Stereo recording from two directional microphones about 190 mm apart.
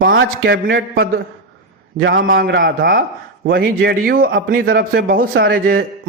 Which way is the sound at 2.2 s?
75° right (ahead or behind).